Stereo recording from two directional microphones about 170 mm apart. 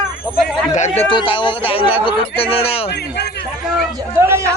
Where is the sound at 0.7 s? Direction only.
45° left (ahead or behind).